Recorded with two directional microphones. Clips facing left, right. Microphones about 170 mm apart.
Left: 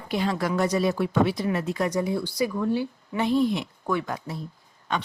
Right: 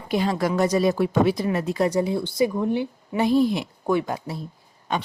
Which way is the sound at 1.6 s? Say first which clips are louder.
Right 4 dB; 35° right (ahead or behind).